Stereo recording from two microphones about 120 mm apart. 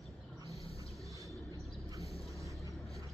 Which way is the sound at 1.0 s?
25° right (ahead or behind).